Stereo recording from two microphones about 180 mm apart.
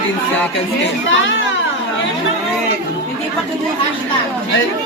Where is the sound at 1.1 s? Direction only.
90° left.